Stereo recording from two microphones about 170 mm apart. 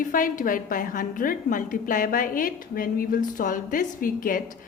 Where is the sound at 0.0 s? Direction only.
50° left (ahead or behind).